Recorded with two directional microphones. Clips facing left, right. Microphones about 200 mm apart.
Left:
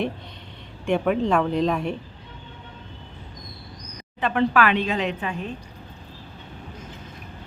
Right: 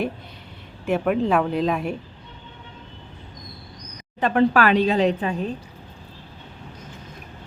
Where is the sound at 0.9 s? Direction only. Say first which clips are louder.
Right 1 dB; 5° right (ahead or behind).